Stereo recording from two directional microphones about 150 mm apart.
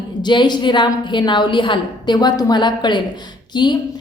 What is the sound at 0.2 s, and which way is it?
A woman's voice, 30° left (ahead or behind).